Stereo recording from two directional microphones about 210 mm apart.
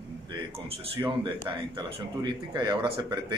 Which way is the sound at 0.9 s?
25° right (ahead or behind).